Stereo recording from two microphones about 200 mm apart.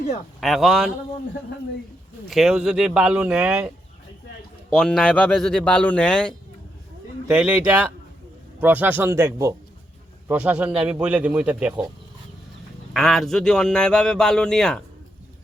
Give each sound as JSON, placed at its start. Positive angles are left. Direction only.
{"t": 0.3, "sound": "a man's voice", "side_deg": 0}
{"t": 2.3, "sound": "a man's voice", "side_deg": 0}
{"t": 4.7, "sound": "a man's voice", "side_deg": 5}
{"t": 7.3, "sound": "a man's voice", "side_deg": -5}
{"t": 12.9, "sound": "a man's voice", "side_deg": 0}